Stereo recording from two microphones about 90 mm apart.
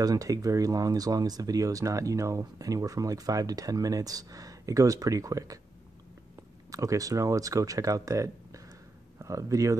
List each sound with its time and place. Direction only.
0.0 s speech: 40° right (ahead or behind)
6.7 s speech: 40° right (ahead or behind)